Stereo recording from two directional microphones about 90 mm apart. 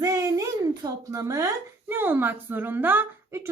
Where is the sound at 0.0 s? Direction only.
35° right (ahead or behind).